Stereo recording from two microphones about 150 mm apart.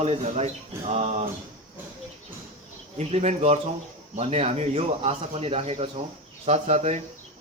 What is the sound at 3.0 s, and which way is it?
Speech, 45° right (ahead or behind).